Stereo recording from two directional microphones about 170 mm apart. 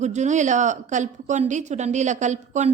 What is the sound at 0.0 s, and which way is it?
A woman's voice, 45° right (ahead or behind).